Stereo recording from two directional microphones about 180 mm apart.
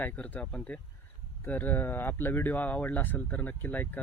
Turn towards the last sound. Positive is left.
turn(degrees=10)  # may be behind; listen again after turning